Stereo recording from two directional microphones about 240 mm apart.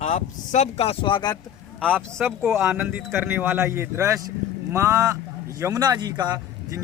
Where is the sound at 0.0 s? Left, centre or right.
Left.